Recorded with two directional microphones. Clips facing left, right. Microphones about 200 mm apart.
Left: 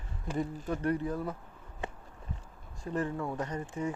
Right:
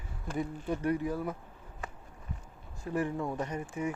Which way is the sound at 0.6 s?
10° right (ahead or behind).